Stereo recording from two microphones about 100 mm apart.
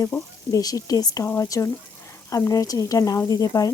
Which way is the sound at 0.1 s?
35° left (ahead or behind).